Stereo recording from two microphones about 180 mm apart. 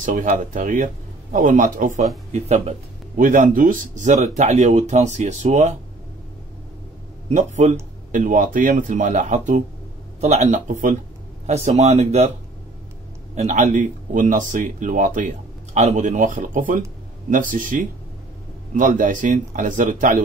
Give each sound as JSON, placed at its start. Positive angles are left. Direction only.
{"t": 0.0, "sound": "speech", "side_deg": -45}
{"t": 3.2, "sound": "speech", "side_deg": -50}
{"t": 7.2, "sound": "speech", "side_deg": -40}
{"t": 13.3, "sound": "speech", "side_deg": -40}